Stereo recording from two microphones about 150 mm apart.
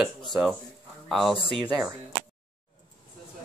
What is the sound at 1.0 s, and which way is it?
Speech, centre (ahead or behind).